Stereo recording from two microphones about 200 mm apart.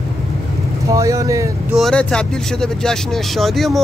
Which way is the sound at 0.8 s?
15° right (ahead or behind).